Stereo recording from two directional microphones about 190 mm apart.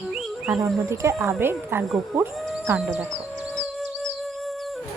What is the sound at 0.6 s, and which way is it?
Speech, 15° right (ahead or behind).